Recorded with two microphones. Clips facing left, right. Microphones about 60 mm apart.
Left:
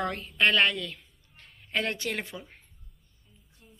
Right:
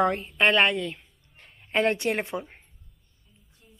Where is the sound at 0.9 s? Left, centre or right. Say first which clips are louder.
Right 4 dB; right.